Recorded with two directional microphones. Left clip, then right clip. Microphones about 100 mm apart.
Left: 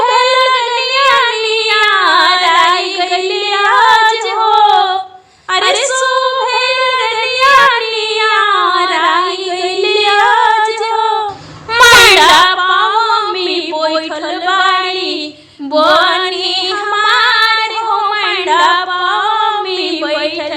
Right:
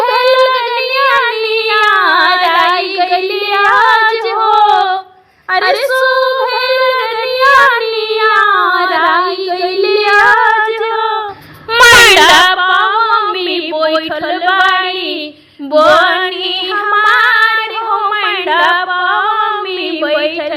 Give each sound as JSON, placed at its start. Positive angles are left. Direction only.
{"t": 0.0, "sound": "female singing", "side_deg": -60}
{"t": 5.5, "sound": "female singing", "side_deg": -45}
{"t": 11.8, "sound": "a sound", "side_deg": -50}
{"t": 14.4, "sound": "female singing", "side_deg": -40}